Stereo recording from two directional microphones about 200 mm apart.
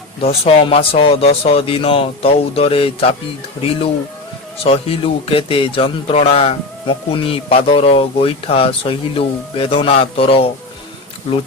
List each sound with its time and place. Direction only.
0.2 s a man's voice: 30° left (ahead or behind)
4.6 s a man's voice: 30° left (ahead or behind)